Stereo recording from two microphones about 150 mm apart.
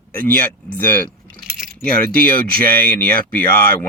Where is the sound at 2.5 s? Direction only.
80° right.